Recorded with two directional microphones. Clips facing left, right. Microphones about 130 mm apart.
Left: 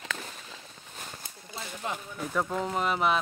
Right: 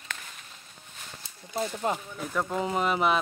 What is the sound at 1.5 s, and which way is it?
Speech, 45° right (ahead or behind).